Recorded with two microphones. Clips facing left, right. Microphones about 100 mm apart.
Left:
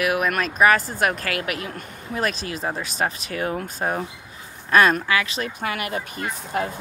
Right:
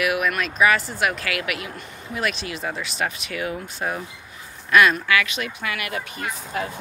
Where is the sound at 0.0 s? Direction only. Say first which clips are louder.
Left 1 dB; 35° left (ahead or behind).